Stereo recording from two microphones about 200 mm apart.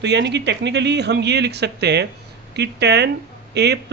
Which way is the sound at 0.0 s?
60° right (ahead or behind).